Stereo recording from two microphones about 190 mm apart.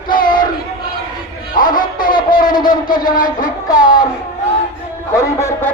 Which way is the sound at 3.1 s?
45° left (ahead or behind).